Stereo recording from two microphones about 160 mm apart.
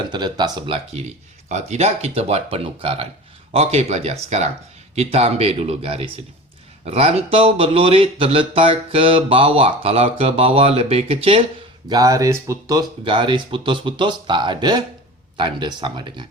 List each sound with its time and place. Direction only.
0.1 s speech: 25° right (ahead or behind)
1.5 s speech: 45° right (ahead or behind)
11.9 s speech: 20° right (ahead or behind)